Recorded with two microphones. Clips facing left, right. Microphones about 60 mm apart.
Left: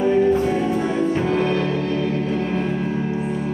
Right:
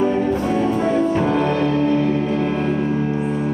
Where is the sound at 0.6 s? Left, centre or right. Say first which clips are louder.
Right 3 dB; right.